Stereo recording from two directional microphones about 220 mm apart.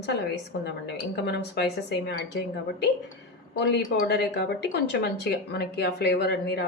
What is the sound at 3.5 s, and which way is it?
A woman's voice, 50° left (ahead or behind).